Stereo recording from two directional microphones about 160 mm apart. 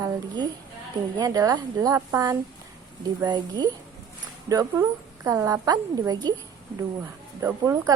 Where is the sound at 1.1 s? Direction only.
25° right (ahead or behind).